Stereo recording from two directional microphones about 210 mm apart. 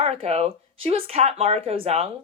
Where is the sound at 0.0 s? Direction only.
30° right (ahead or behind).